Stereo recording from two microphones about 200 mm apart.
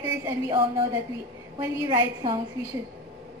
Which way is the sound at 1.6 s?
25° right (ahead or behind).